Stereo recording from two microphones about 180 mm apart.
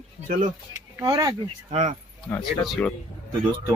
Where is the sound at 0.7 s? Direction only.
20° right (ahead or behind).